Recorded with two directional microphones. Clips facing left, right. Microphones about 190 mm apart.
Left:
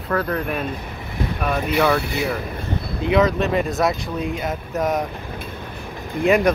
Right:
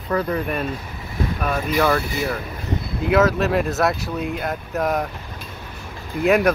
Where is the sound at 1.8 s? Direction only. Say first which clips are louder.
Even; centre (ahead or behind).